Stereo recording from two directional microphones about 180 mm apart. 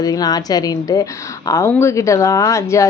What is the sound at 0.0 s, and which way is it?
A woman's voice, 20° left (ahead or behind).